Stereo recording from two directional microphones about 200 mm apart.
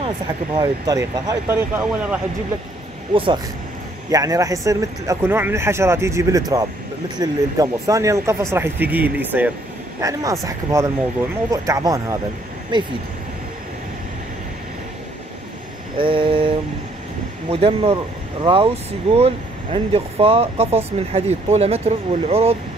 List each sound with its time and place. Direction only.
0.6 s speech: 20° right (ahead or behind)
4.1 s speech: 15° right (ahead or behind)
16.0 s speech: 25° right (ahead or behind)